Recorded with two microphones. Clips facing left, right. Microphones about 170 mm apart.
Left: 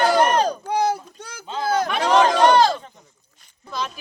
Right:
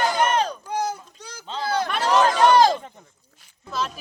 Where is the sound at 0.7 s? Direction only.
65° left (ahead or behind).